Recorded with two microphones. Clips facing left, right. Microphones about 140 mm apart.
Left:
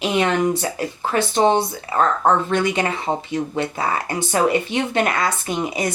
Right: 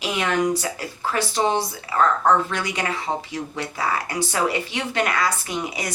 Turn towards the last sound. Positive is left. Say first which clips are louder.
# left 5 dB
turn(degrees=25)  # may be behind; listen again after turning